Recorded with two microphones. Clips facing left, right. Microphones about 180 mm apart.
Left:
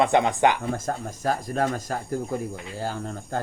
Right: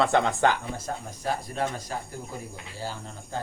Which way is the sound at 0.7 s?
45° left (ahead or behind).